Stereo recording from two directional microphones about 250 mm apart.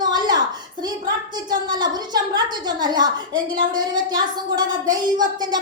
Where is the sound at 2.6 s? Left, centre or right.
Centre.